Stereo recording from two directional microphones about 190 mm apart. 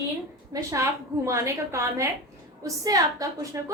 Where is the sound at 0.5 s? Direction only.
15° right (ahead or behind).